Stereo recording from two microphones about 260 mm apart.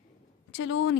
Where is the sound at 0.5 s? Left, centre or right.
Left.